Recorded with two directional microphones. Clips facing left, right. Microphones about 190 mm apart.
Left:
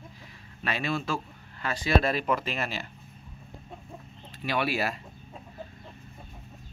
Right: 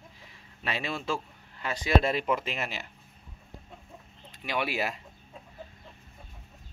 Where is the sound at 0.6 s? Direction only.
25° right (ahead or behind).